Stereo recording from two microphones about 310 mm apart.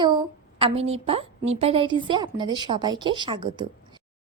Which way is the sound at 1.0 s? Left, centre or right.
Centre.